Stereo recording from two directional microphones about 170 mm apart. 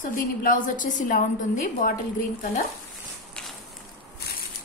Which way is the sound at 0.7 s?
50° left (ahead or behind).